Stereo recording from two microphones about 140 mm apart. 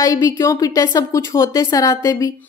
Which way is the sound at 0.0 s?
25° left (ahead or behind).